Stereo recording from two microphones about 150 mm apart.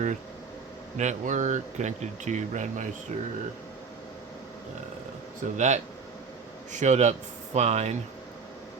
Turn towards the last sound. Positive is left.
turn(degrees=-45)  # may be behind; listen again after turning